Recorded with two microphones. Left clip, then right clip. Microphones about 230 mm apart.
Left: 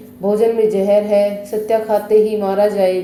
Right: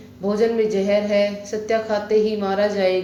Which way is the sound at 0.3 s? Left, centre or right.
Left.